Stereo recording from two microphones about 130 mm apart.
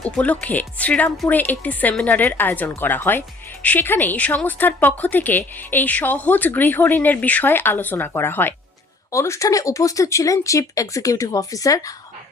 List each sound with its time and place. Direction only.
0.2 s speech: 10° left (ahead or behind)